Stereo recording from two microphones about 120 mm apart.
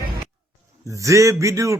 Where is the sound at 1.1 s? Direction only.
25° right (ahead or behind).